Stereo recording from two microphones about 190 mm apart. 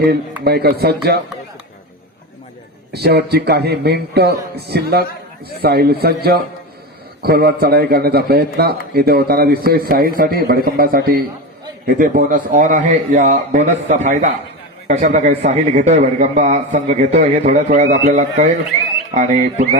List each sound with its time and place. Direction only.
0.4 s speech: 55° right (ahead or behind)
2.9 s a man's voice: 55° right (ahead or behind); by 19.6 s 40° right (ahead or behind)